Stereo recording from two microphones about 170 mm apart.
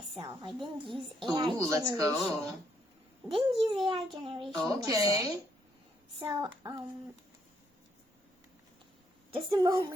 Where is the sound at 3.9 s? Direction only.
30° right (ahead or behind).